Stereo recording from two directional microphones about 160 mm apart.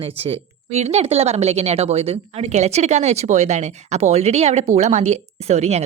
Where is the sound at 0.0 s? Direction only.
40° right (ahead or behind).